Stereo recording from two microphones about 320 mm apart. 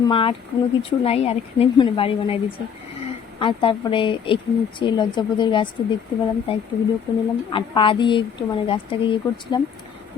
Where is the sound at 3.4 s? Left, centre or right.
Centre.